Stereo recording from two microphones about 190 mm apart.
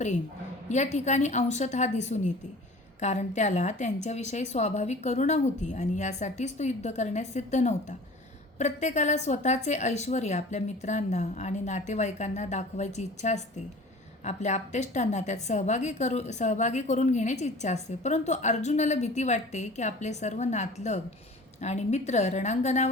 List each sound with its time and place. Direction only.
0.7 s a woman's voice: 35° left (ahead or behind)